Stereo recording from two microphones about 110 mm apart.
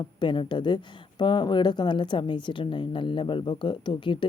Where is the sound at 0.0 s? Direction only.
45° left (ahead or behind).